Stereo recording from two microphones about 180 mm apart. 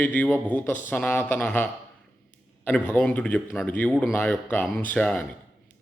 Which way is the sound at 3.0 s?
5° left (ahead or behind).